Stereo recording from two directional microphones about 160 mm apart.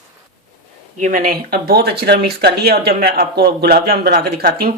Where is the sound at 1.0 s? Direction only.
55° right (ahead or behind).